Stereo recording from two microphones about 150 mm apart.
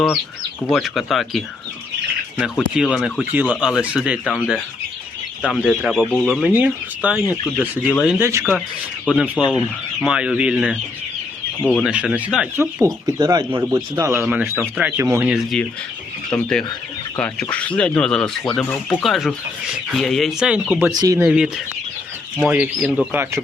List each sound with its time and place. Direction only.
0.7 s speech: centre (ahead or behind)
2.4 s speech: 5° right (ahead or behind); by 8.4 s 20° right (ahead or behind)
9.4 s speech: 5° right (ahead or behind)
12.8 s speech: 20° right (ahead or behind)
15.3 s speech: centre (ahead or behind)
20.9 s speech: 25° right (ahead or behind)
21.2 s speech: 5° right (ahead or behind)